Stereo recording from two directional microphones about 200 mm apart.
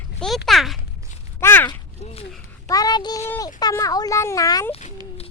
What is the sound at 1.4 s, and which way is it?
A child's voice, 10° left (ahead or behind).